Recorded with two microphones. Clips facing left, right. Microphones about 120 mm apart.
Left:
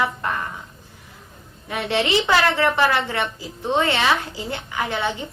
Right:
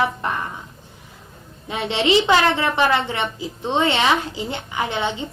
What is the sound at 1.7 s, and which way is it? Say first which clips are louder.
Music: right 2 dB; 20° right (ahead or behind).